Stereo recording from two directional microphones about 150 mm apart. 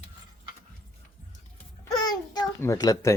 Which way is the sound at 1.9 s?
25° left (ahead or behind).